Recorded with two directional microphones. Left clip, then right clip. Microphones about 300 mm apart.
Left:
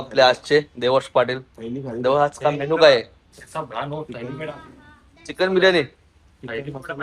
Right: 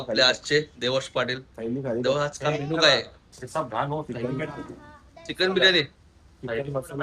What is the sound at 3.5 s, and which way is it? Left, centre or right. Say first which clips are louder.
Speech: right 1 dB; centre.